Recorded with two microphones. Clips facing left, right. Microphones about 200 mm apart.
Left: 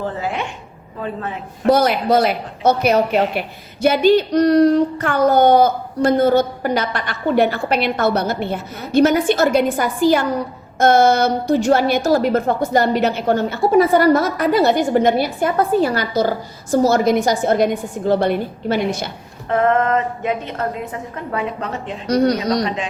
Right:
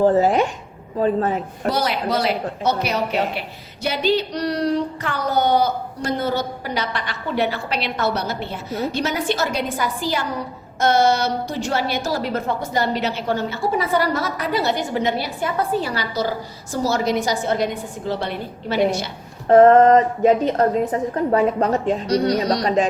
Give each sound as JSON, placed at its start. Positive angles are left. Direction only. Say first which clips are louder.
{"t": 0.0, "sound": "a woman's voice", "louder": "right 8 dB", "side_deg": -40}
{"t": 1.6, "sound": "speech", "louder": "left 8 dB", "side_deg": 50}
{"t": 19.5, "sound": "a woman's voice", "louder": "right 6 dB", "side_deg": -35}
{"t": 22.0, "sound": "speech", "louder": "left 7 dB", "side_deg": 50}
{"t": 22.6, "sound": "a woman's voice", "louder": "right 4 dB", "side_deg": -40}